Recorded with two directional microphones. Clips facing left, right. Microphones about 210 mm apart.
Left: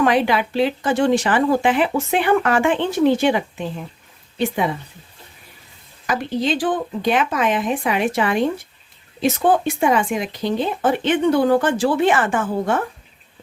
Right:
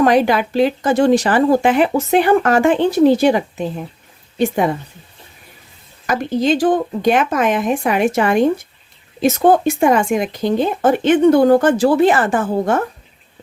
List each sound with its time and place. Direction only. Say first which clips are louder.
0.0 s speech: right 4 dB; 45° right (ahead or behind)
6.1 s speech: right 5 dB; 45° right (ahead or behind)